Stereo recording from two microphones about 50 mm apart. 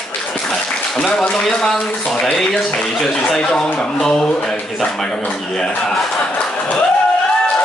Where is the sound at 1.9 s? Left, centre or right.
Left.